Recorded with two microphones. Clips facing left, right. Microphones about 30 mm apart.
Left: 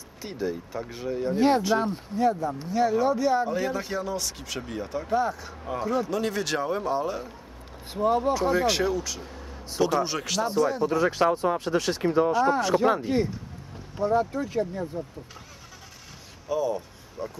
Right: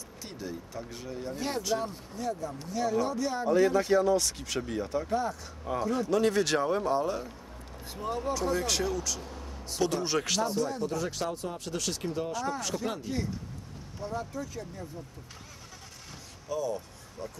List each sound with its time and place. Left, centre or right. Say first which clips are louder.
0.2 s speech: left 9 dB; centre
1.3 s speech: left 13 dB; left
1.6 s speech: left 6 dB; left
7.9 s speech: left 9 dB; left; by 10.4 s centre
10.4 s speech: left 6 dB; centre; by 14.9 s left
16.4 s a sound: left 6 dB; centre